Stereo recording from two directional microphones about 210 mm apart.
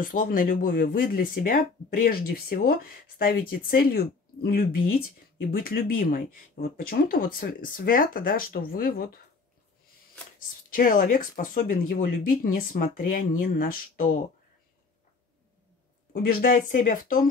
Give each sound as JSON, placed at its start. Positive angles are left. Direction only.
{"t": 0.0, "sound": "speech", "side_deg": 40}
{"t": 10.7, "sound": "speech", "side_deg": 40}
{"t": 16.1, "sound": "speech", "side_deg": 45}